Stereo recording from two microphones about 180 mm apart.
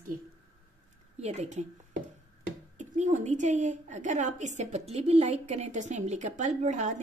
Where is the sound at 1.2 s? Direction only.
40° right (ahead or behind).